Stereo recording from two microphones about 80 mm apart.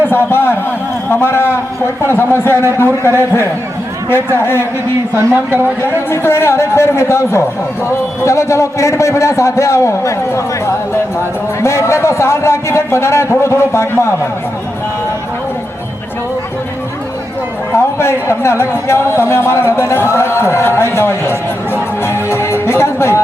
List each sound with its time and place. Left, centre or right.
0.1 s a man's voice: left
5.3 s a man's voice: right
5.8 s a man's voice: left
18.0 s a man's voice: left
22.0 s music: left